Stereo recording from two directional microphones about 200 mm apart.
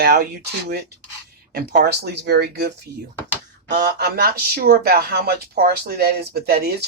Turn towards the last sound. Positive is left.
turn(degrees=-50)  # may be behind; listen again after turning